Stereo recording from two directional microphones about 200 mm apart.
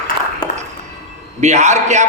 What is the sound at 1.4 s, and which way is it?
Speech, 35° right (ahead or behind).